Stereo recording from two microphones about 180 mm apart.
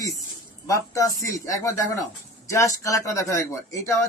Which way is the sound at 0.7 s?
20° left (ahead or behind).